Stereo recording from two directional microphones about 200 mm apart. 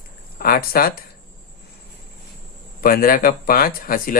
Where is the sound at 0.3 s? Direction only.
50° left (ahead or behind).